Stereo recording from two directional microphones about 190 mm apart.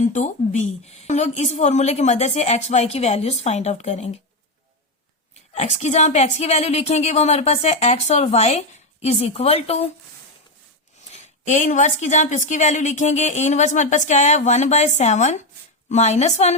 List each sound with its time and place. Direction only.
0.0 s a woman's voice: 40° left (ahead or behind)
5.3 s a woman's voice: 35° left (ahead or behind)
11.1 s a woman's voice: 40° left (ahead or behind)